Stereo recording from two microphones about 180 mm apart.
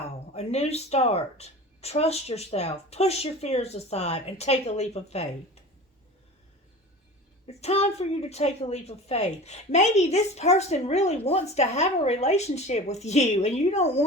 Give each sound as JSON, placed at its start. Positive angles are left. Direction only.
{"t": 0.3, "sound": "a woman's voice", "side_deg": 35}
{"t": 7.4, "sound": "a woman's voice", "side_deg": 35}